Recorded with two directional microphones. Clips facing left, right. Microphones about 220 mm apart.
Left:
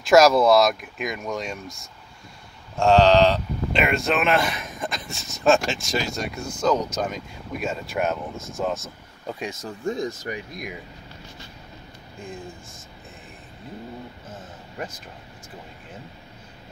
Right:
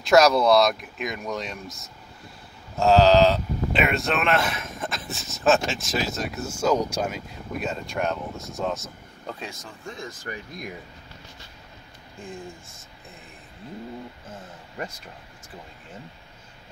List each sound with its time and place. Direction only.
0.0 s speech: centre (ahead or behind)
9.3 s speech: 15° left (ahead or behind)